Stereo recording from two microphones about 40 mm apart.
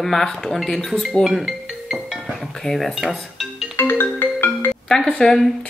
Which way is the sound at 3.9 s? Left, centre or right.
Left.